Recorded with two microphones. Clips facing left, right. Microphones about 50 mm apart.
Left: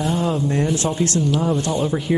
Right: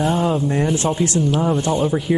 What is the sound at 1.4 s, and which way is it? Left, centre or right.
Speech, right.